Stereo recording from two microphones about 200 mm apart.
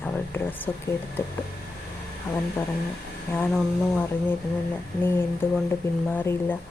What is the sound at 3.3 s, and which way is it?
Speech, 5° left (ahead or behind).